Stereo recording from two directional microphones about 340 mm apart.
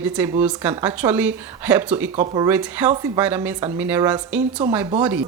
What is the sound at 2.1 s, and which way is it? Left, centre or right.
Speech, centre.